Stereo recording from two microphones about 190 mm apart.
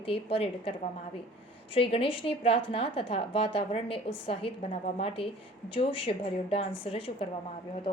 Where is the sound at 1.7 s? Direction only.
30° left (ahead or behind).